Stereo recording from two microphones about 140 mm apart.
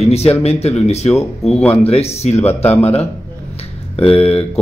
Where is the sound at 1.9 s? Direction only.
50° left (ahead or behind).